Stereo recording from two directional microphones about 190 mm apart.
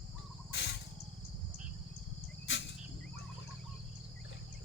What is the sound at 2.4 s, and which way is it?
Turkey, 70° left (ahead or behind).